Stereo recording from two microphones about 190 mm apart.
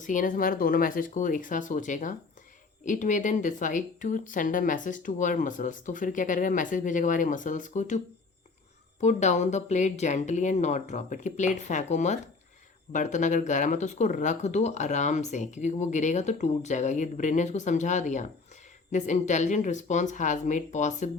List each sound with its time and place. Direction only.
0.0 s speech: 45° left (ahead or behind)